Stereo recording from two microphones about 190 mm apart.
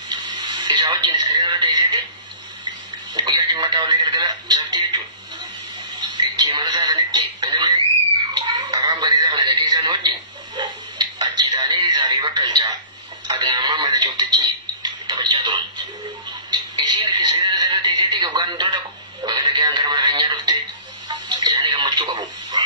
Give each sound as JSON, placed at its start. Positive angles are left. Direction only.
{"t": 0.1, "sound": "radio", "side_deg": -25}
{"t": 3.2, "sound": "speech", "side_deg": -20}
{"t": 5.9, "sound": "a sound", "side_deg": -25}
{"t": 8.5, "sound": "speech", "side_deg": -25}
{"t": 13.3, "sound": "a sound", "side_deg": -25}
{"t": 21.1, "sound": "radio", "side_deg": -25}